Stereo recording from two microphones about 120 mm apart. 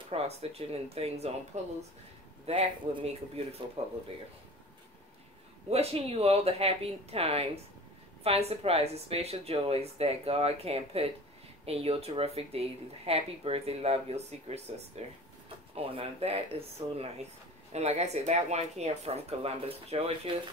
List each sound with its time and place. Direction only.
0.1 s speech: 55° right (ahead or behind)
1.6 s speech: 70° right (ahead or behind)
2.4 s a man's voice: 60° right (ahead or behind)
5.7 s speech: 60° right (ahead or behind)
15.7 s speech: 50° right (ahead or behind)